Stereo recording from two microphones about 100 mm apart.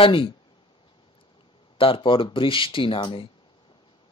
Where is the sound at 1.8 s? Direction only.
60° left (ahead or behind).